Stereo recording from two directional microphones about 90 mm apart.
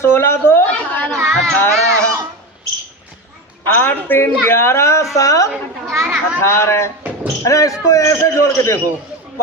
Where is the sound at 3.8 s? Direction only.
25° left (ahead or behind).